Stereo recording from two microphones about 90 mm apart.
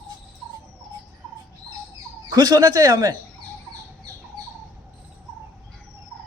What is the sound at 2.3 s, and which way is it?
Speech, 45° right (ahead or behind).